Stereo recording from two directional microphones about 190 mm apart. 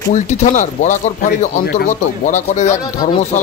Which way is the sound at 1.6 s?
55° left (ahead or behind).